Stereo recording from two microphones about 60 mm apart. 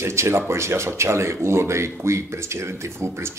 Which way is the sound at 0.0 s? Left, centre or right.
Right.